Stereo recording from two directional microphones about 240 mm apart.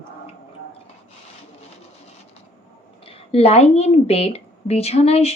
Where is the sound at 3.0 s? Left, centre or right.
Left.